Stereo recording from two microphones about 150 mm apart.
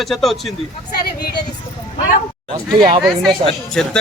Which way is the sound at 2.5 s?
35° right (ahead or behind).